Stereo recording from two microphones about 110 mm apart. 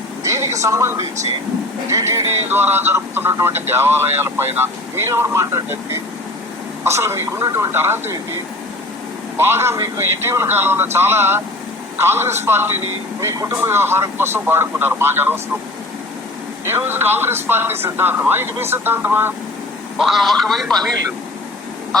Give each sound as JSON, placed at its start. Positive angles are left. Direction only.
{"t": 0.2, "sound": "a sound", "side_deg": -25}
{"t": 0.6, "sound": "speech", "side_deg": -25}
{"t": 9.4, "sound": "speech", "side_deg": -20}
{"t": 16.6, "sound": "speech", "side_deg": -20}
{"t": 20.0, "sound": "speech", "side_deg": 0}